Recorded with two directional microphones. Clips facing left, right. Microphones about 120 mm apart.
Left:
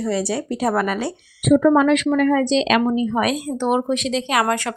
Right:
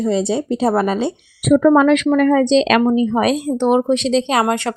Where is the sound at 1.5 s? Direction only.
60° right (ahead or behind); by 2.4 s 40° right (ahead or behind).